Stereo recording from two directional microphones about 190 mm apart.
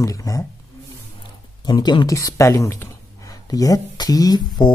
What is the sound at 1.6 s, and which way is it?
Speech, 20° left (ahead or behind).